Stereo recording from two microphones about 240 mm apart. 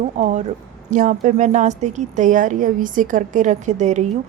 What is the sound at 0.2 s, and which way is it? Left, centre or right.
A woman's voice, right.